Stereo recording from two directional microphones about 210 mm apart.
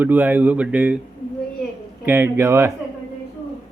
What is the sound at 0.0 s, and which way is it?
Speech, 10° right (ahead or behind).